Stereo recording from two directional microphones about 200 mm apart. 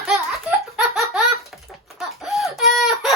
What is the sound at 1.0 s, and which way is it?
Baby laughter, centre (ahead or behind).